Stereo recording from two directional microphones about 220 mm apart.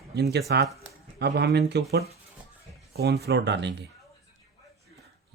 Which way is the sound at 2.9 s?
45° right (ahead or behind).